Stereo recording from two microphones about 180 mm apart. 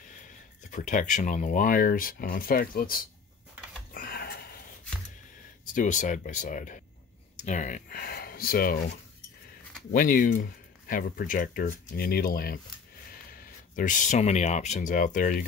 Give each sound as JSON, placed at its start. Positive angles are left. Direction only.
{"t": 0.7, "sound": "speech", "side_deg": 45}
{"t": 3.9, "sound": "a sound", "side_deg": 55}
{"t": 5.8, "sound": "speech", "side_deg": 45}
{"t": 9.9, "sound": "speech", "side_deg": 50}